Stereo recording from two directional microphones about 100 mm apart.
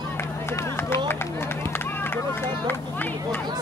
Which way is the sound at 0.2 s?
25° left (ahead or behind).